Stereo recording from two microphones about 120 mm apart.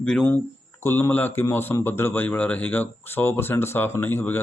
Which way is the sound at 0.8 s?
20° left (ahead or behind).